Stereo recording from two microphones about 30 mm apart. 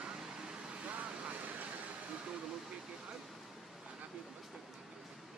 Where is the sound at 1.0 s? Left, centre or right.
Right.